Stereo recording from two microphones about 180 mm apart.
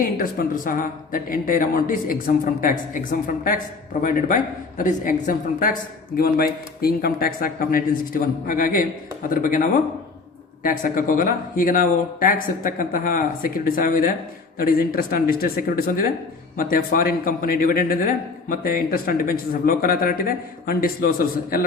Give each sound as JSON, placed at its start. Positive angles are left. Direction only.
{"t": 0.0, "sound": "a man's voice", "side_deg": 50}